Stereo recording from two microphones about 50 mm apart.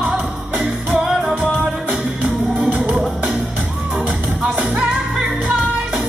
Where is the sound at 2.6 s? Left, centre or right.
Centre.